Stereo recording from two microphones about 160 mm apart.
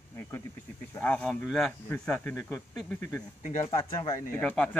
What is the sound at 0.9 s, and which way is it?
Speech, 5° left (ahead or behind).